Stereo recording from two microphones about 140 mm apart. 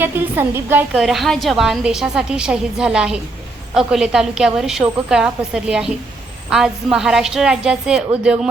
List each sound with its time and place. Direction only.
0.0 s a woman's voice: 15° right (ahead or behind)
0.9 s a woman's voice: centre (ahead or behind)